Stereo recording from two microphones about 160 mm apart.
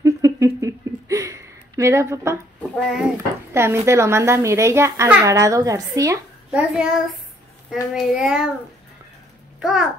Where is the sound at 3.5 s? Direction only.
15° right (ahead or behind).